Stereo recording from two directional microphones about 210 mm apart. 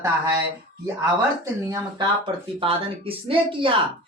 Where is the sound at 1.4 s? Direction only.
15° right (ahead or behind).